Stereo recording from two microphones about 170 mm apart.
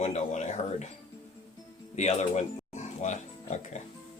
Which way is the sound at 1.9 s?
45° left (ahead or behind).